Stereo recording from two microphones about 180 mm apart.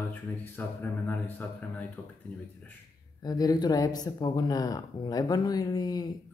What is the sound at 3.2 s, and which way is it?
Speech, 20° left (ahead or behind).